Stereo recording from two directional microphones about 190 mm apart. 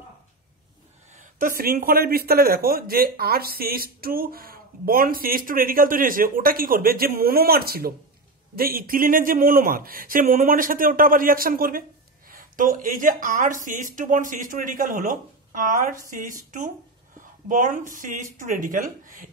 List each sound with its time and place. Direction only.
1.1 s speech: 45° right (ahead or behind)